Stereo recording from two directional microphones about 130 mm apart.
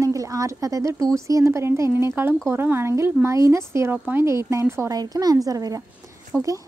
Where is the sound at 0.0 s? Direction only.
25° right (ahead or behind).